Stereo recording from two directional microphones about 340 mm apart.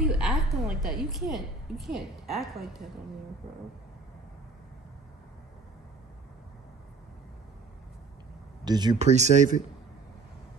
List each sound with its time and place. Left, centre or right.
0.0 s a woman's voice: centre
8.6 s speech: centre